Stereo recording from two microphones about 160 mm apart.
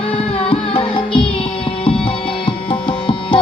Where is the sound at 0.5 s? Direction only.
35° left (ahead or behind).